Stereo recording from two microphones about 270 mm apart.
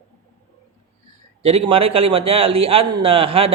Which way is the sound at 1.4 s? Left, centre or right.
Right.